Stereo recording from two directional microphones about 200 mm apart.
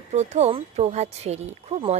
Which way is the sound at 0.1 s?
35° right (ahead or behind).